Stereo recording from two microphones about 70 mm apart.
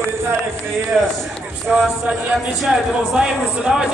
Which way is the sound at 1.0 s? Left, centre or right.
Centre.